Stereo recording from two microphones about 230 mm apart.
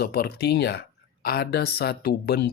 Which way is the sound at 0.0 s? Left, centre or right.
Left.